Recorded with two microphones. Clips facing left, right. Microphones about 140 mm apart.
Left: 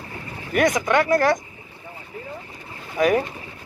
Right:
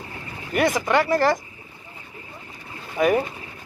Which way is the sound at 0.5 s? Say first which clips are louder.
Left 1 dB; 5° right (ahead or behind).